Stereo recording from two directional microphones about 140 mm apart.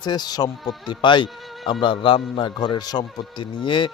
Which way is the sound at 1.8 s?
35° left (ahead or behind).